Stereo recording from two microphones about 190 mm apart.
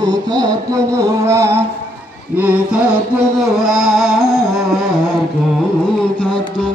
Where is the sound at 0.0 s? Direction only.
20° right (ahead or behind).